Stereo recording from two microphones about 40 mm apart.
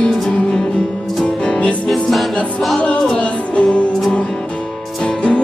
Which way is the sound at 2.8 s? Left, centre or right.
Left.